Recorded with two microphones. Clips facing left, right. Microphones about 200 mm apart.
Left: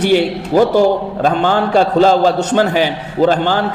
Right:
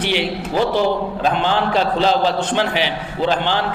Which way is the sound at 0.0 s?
45° left (ahead or behind).